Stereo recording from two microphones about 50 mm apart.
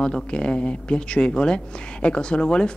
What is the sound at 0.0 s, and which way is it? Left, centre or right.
Speech, centre.